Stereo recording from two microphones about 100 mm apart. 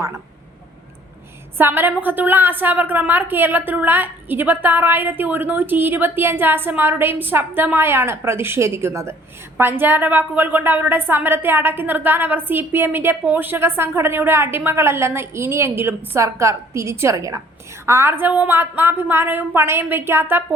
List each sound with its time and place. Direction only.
1.5 s a woman's voice: 20° right (ahead or behind)